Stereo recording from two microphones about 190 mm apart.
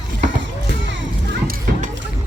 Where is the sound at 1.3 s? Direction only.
50° right (ahead or behind).